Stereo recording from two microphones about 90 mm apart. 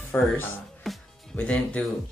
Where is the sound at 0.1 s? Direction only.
20° left (ahead or behind).